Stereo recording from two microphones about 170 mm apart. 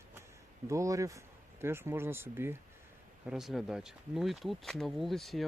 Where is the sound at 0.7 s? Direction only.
20° right (ahead or behind).